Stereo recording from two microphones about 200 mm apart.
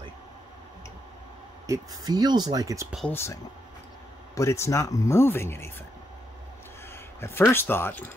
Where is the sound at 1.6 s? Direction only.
15° right (ahead or behind).